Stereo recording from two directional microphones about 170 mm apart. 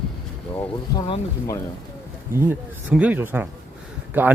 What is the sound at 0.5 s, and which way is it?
Speech, 15° left (ahead or behind).